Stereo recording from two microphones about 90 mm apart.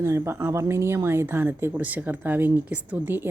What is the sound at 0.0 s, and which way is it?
A woman's voice, 30° right (ahead or behind).